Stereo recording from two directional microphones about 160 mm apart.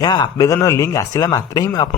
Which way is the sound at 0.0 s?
25° left (ahead or behind).